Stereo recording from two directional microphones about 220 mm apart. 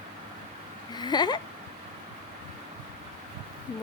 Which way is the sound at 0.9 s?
20° left (ahead or behind).